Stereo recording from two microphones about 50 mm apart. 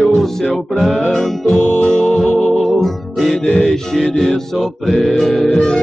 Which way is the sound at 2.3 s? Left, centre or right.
Centre.